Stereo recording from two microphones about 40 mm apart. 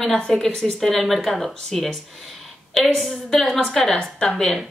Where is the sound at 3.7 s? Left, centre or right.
Centre.